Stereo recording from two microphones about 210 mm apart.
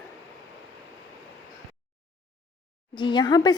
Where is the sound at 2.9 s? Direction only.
20° left (ahead or behind).